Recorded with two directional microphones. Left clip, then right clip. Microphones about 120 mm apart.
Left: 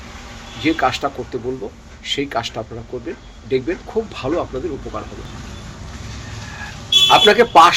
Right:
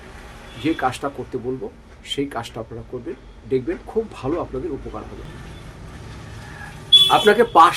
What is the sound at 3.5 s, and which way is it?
Speech, 30° right (ahead or behind).